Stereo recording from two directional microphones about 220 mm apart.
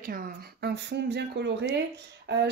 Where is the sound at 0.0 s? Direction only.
45° right (ahead or behind).